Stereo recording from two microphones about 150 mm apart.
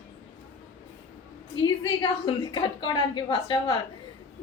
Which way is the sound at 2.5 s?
30° left (ahead or behind).